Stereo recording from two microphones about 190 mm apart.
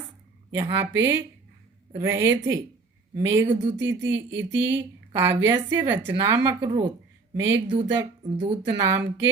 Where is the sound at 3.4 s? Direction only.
25° right (ahead or behind).